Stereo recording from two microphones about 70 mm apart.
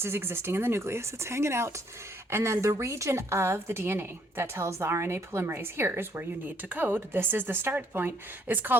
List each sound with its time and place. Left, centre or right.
0.0 s a woman's voice: right